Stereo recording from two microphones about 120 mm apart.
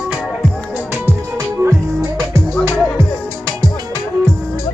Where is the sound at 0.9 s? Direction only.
20° right (ahead or behind).